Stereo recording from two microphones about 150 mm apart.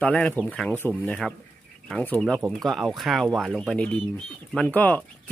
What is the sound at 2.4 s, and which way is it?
Speech, centre (ahead or behind).